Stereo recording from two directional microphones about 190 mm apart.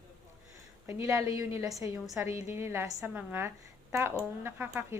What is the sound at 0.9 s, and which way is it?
A woman's voice, 15° right (ahead or behind).